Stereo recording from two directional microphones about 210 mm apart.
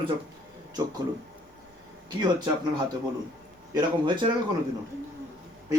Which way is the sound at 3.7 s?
20° right (ahead or behind).